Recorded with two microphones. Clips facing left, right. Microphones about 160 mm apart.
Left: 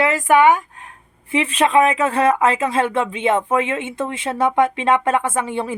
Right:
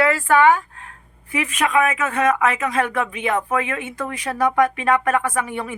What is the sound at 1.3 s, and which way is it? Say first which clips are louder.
Speech: left 4 dB; 30° left (ahead or behind).